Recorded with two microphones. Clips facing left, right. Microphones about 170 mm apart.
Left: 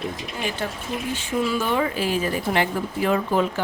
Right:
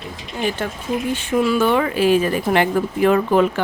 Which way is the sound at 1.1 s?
65° right (ahead or behind).